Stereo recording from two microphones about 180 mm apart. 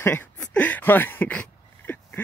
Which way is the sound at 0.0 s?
10° left (ahead or behind).